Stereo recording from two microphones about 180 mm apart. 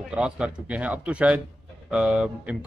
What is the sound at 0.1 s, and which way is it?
Speech, 5° right (ahead or behind).